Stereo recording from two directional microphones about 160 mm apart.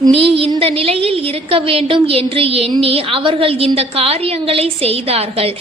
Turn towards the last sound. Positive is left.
turn(degrees=-40)  # may be behind; listen again after turning